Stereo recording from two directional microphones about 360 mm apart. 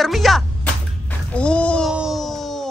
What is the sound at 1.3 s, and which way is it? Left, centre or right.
Music, centre.